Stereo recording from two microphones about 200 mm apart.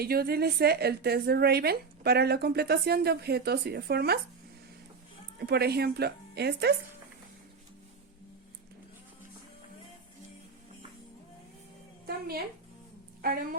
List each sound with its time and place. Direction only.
0.0 s a woman's voice: 50° right (ahead or behind)
5.4 s a woman's voice: 55° right (ahead or behind)
13.2 s a woman's voice: 45° right (ahead or behind)